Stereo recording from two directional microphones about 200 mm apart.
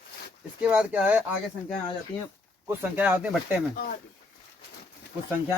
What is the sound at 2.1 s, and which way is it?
Speech, 25° left (ahead or behind).